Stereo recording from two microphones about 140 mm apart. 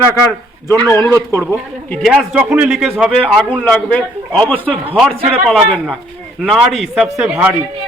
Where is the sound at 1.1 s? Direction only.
20° right (ahead or behind).